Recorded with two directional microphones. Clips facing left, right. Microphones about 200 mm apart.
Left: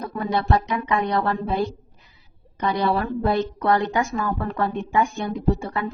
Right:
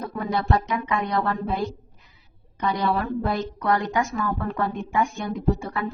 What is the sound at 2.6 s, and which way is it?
A woman's voice, 35° left (ahead or behind).